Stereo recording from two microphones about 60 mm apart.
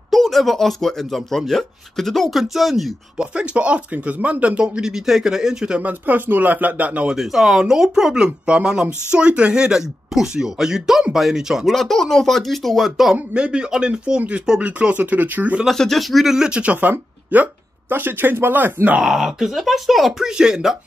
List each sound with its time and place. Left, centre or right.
0.1 s speech: centre
3.3 s speech: centre
5.8 s speech: right
7.2 s speech: centre
11.7 s speech: centre
13.3 s speech: centre
15.6 s speech: centre
16.4 s speech: centre
17.3 s speech: right
19.0 s speech: centre